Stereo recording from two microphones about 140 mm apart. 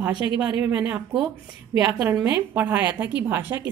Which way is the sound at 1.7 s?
25° right (ahead or behind).